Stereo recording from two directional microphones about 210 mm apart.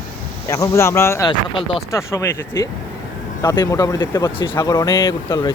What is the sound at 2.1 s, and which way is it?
Speech, 15° left (ahead or behind).